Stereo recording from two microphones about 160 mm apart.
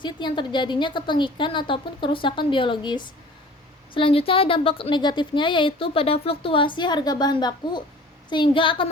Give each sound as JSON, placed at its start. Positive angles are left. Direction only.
{"t": 0.0, "sound": "speech", "side_deg": 30}